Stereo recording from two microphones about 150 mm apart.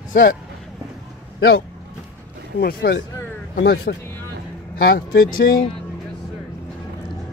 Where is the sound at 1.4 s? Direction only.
90° left.